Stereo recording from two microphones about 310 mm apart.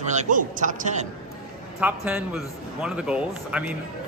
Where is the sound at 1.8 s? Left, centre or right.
Centre.